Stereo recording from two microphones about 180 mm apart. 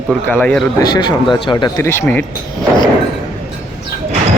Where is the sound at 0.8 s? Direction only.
25° left (ahead or behind).